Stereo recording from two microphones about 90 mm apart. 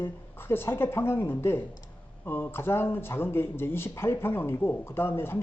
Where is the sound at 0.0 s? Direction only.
25° left (ahead or behind).